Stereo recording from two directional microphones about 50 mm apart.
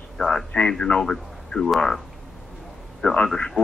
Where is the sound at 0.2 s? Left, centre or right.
Centre.